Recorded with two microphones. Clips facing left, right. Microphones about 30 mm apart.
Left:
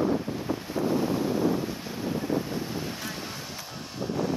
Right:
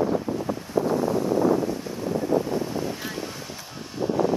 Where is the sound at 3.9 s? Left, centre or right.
Centre.